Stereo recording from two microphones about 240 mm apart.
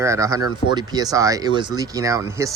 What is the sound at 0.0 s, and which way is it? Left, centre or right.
Speech, centre.